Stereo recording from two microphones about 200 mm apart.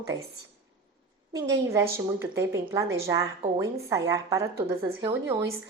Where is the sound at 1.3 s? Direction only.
15° right (ahead or behind).